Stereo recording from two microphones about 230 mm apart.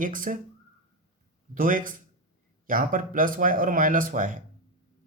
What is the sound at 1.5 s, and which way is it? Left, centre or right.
Speech, right.